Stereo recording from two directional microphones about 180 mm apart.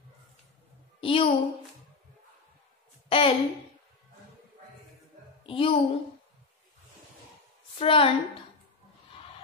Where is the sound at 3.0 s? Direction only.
30° left (ahead or behind).